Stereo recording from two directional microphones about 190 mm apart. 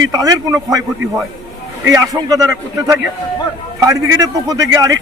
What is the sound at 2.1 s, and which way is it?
A man's voice, 20° right (ahead or behind).